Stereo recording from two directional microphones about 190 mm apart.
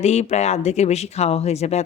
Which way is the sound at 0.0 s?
35° left (ahead or behind).